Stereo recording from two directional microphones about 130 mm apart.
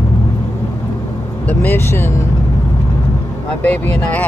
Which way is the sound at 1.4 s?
15° left (ahead or behind).